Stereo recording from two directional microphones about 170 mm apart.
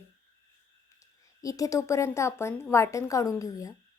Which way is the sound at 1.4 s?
20° left (ahead or behind).